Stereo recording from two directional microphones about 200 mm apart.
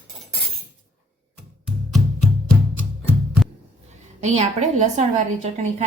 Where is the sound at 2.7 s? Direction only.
10° left (ahead or behind).